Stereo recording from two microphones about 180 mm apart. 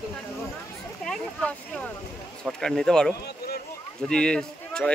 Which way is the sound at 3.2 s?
60° left (ahead or behind).